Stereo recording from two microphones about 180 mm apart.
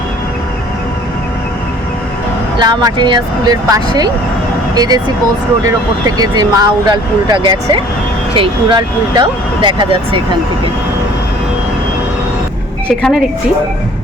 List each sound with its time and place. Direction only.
2.6 s speech: 25° right (ahead or behind)
13.0 s a woman's voice: centre (ahead or behind)